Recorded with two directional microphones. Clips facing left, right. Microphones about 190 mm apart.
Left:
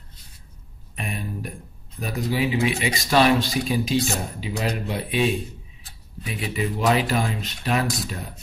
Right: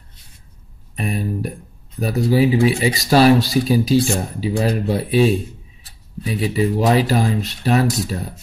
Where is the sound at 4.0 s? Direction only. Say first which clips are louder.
Right 6 dB; 30° right (ahead or behind).